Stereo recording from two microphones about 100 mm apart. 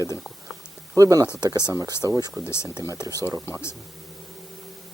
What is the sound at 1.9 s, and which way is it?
Speech, 25° left (ahead or behind).